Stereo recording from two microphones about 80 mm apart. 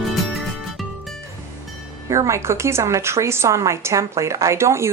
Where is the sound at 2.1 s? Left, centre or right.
Right.